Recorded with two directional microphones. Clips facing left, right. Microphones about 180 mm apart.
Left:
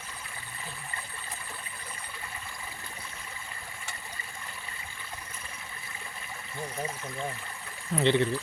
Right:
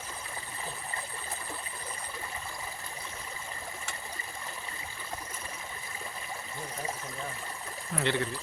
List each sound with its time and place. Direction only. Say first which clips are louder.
7.9 s speech: left 6 dB; 20° left (ahead or behind)